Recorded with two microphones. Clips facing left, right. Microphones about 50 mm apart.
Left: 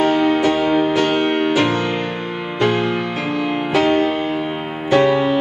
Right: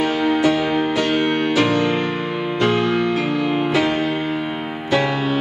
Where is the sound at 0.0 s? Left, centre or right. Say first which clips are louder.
Left 2 dB; centre.